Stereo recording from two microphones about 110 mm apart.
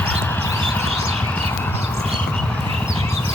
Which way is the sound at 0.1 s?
15° left (ahead or behind).